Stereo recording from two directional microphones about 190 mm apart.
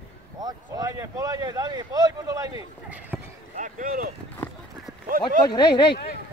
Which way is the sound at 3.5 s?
45° right (ahead or behind).